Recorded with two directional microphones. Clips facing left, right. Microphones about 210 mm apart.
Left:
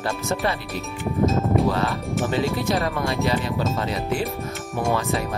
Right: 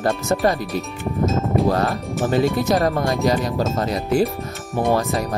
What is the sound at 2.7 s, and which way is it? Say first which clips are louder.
Speech: right 5 dB; 45° right (ahead or behind).